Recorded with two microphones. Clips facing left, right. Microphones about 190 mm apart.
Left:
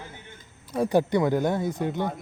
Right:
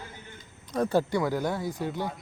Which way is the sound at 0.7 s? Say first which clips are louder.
Left 3 dB; 15° left (ahead or behind).